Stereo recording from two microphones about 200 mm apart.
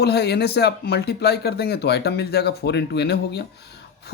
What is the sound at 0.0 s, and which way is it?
Speech, 55° left (ahead or behind).